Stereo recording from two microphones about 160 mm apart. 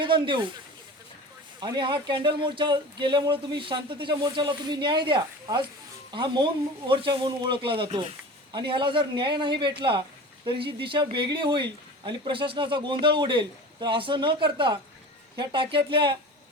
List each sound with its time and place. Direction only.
0.0 s speech: 30° right (ahead or behind)
1.6 s speech: 30° right (ahead or behind)